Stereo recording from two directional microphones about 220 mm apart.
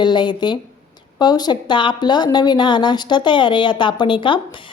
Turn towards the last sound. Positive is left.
turn(degrees=20)  # may be behind; listen again after turning